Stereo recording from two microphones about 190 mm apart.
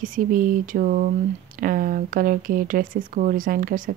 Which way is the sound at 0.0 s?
45° right (ahead or behind).